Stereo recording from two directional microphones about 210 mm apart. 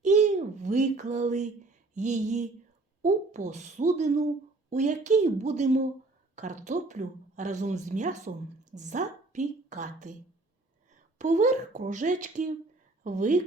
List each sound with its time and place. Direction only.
0.0 s a sound: 35° right (ahead or behind)
3.0 s a woman's voice: 35° right (ahead or behind)
11.2 s speech: 35° right (ahead or behind)